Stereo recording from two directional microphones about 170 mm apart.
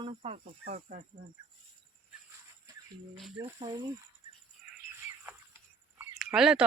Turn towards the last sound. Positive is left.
turn(degrees=-5)  # may be behind; listen again after turning